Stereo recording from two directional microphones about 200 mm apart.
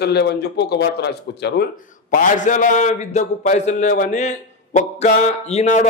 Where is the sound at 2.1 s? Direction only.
40° left (ahead or behind).